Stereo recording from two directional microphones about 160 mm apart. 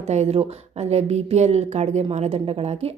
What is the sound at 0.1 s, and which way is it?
A woman's voice, 40° right (ahead or behind).